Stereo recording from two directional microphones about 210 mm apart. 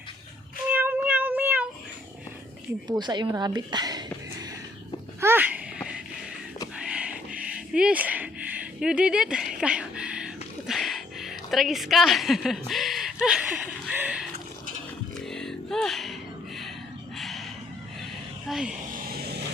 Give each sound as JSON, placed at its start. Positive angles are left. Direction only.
{"t": 0.7, "sound": "cat", "side_deg": -10}
{"t": 2.8, "sound": "speech", "side_deg": -20}
{"t": 5.2, "sound": "a sound", "side_deg": -10}
{"t": 17.2, "sound": "a sound", "side_deg": 0}
{"t": 18.4, "sound": "speech", "side_deg": -5}
{"t": 18.9, "sound": "vehicle", "side_deg": -45}